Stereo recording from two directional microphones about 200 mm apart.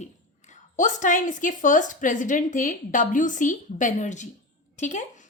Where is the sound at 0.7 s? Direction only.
40° left (ahead or behind).